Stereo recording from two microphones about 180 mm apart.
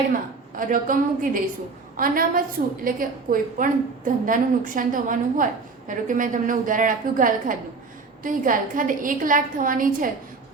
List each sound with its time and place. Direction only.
0.1 s a woman's voice: 50° right (ahead or behind)